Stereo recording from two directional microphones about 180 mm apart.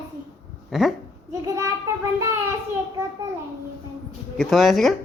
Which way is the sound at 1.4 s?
15° right (ahead or behind).